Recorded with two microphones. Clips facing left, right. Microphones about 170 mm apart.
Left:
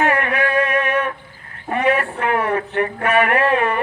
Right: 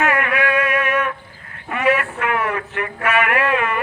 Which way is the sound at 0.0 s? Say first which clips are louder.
Left 1 dB; 35° left (ahead or behind).